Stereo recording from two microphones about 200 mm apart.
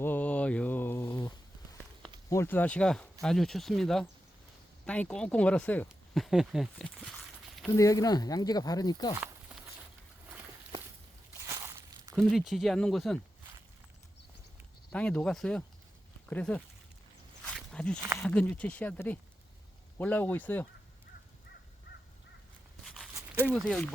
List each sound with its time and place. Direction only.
0.0 s a sound: 10° left (ahead or behind)
2.3 s speech: 10° left (ahead or behind)
7.8 s speech: 15° left (ahead or behind)
11.3 s walk: 15° right (ahead or behind)
12.1 s speech: centre (ahead or behind)
14.9 s speech: 5° left (ahead or behind)
17.4 s a sound: 5° left (ahead or behind)
18.2 s speech: 5° left (ahead or behind)
22.8 s a sound: centre (ahead or behind)
23.3 s speech: 5° right (ahead or behind)